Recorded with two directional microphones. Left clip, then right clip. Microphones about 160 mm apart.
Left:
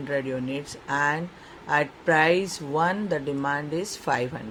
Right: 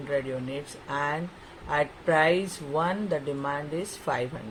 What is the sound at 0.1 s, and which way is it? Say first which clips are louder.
Speech: left 1 dB; 35° left (ahead or behind).